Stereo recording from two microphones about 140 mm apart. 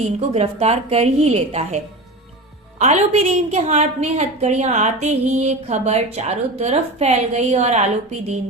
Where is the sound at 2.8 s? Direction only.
50° right (ahead or behind).